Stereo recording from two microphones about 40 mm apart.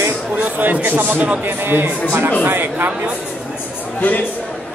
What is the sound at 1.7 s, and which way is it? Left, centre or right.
Speech, right.